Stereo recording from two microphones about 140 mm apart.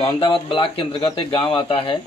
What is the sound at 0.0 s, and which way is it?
Speech, 40° left (ahead or behind).